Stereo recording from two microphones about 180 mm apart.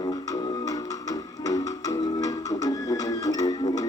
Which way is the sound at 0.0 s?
25° left (ahead or behind).